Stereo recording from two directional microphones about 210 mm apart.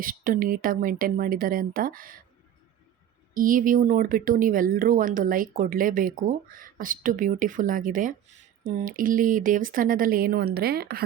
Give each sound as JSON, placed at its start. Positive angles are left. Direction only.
{"t": 0.0, "sound": "speech", "side_deg": -40}
{"t": 3.3, "sound": "speech", "side_deg": -40}